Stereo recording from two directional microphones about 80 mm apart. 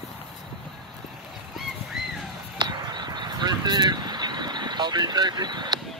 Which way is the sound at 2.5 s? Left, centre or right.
Right.